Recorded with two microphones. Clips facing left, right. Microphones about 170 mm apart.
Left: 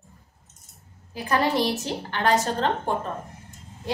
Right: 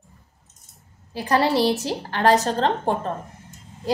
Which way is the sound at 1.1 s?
35° right (ahead or behind).